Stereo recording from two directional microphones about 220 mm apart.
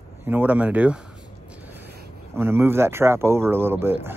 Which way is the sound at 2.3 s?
10° right (ahead or behind).